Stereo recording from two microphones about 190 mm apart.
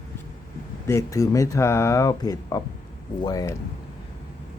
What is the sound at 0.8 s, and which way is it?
A man's voice, 15° left (ahead or behind).